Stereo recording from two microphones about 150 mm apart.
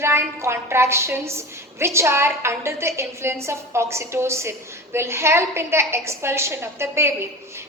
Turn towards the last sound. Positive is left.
turn(degrees=-15)  # may be behind; listen again after turning